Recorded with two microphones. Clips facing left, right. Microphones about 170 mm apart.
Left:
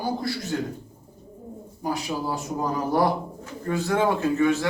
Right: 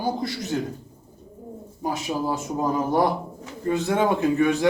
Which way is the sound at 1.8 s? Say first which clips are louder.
Right 2 dB; 20° right (ahead or behind).